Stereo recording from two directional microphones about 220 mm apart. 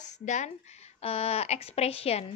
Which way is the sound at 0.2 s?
35° left (ahead or behind).